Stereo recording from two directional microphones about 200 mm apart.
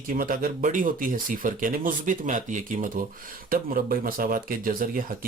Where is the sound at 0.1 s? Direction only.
45° right (ahead or behind).